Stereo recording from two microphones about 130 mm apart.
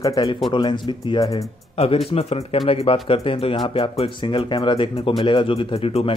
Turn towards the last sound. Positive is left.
turn(degrees=45)  # may be behind; listen again after turning